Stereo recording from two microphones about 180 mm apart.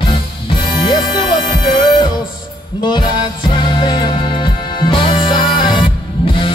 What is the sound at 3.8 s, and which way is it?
Music, 25° left (ahead or behind).